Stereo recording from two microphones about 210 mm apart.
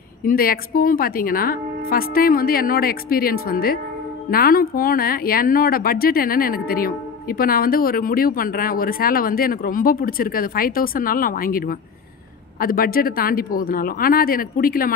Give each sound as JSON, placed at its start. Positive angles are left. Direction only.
{"t": 0.2, "sound": "speech", "side_deg": 45}